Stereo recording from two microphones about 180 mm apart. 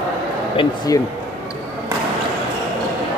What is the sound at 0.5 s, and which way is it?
Speech, 20° left (ahead or behind).